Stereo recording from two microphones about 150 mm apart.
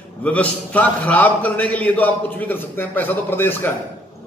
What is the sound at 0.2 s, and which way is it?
A man's voice, 10° left (ahead or behind).